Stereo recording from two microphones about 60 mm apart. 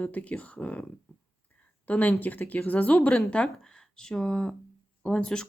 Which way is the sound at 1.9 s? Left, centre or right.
Left.